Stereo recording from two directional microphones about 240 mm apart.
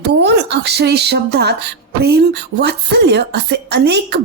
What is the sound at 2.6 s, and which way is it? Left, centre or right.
Speech, right.